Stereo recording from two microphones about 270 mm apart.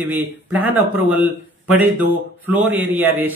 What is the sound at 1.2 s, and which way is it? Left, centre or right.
Speech, centre.